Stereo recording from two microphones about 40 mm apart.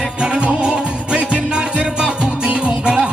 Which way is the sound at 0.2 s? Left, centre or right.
Right.